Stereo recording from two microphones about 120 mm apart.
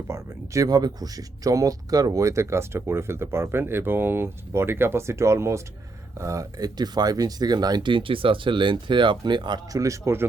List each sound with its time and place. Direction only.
0.1 s speech: 25° right (ahead or behind)
9.7 s speech: 25° right (ahead or behind)